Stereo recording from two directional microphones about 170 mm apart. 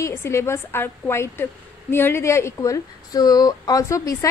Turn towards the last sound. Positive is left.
turn(degrees=20)  # may be behind; listen again after turning